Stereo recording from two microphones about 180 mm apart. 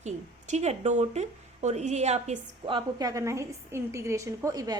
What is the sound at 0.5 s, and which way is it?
A woman's voice, 35° right (ahead or behind).